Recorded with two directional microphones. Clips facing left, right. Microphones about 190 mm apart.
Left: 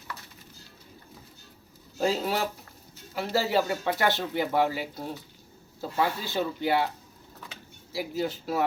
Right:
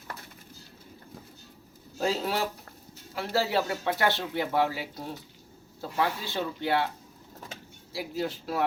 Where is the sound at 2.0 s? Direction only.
Centre (ahead or behind).